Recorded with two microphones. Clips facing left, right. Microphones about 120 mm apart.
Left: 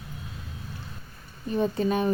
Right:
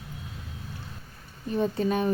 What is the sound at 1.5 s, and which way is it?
Speech, 30° left (ahead or behind).